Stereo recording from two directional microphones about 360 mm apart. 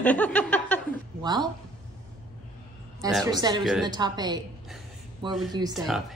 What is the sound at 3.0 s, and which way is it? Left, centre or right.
Speech, centre.